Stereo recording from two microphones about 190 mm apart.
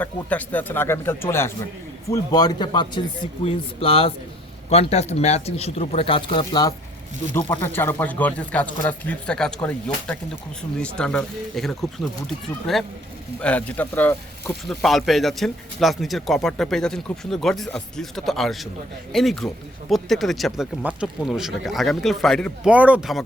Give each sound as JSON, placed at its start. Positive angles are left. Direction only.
{"t": 0.0, "sound": "a man's voice", "side_deg": 10}
{"t": 7.6, "sound": "speech", "side_deg": 10}